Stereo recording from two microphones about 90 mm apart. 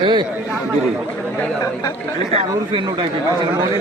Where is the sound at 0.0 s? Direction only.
55° right (ahead or behind).